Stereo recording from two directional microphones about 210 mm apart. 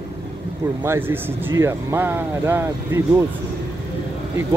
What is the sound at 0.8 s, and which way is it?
Speech, 10° right (ahead or behind).